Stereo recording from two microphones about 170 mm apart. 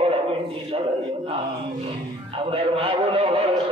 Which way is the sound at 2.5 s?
35° right (ahead or behind).